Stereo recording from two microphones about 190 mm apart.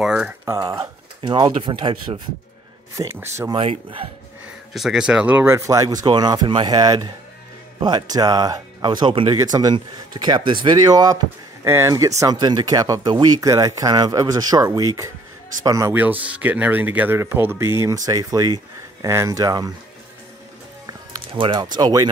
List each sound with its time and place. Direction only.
0.0 s speech: 5° right (ahead or behind)
0.5 s speech: 20° right (ahead or behind)
3.2 s speech: 15° right (ahead or behind)
3.5 s speech: 30° right (ahead or behind)
4.7 s speech: centre (ahead or behind); by 19.7 s 20° right (ahead or behind)
21.3 s speech: 25° right (ahead or behind)